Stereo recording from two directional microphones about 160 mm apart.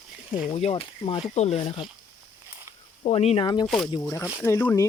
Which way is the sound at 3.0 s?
40° left (ahead or behind).